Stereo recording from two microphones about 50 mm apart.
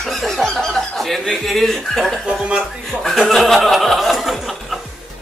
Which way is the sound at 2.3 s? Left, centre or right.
Centre.